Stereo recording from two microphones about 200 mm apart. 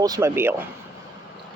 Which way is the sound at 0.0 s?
15° right (ahead or behind).